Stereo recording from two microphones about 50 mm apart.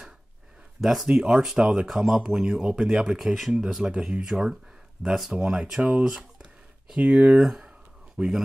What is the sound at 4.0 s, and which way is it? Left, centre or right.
Speech, centre.